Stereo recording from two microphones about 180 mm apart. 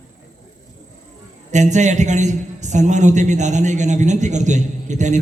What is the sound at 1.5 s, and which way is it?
A man's voice, 40° right (ahead or behind).